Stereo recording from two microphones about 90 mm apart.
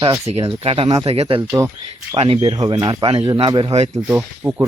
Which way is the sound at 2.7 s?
45° right (ahead or behind).